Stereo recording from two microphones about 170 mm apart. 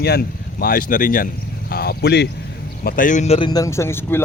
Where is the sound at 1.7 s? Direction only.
65° left (ahead or behind).